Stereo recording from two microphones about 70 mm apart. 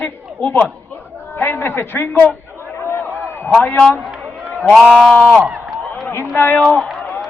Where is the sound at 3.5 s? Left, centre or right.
Centre.